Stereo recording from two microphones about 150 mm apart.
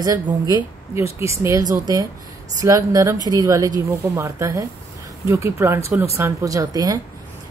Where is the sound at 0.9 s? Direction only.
20° right (ahead or behind).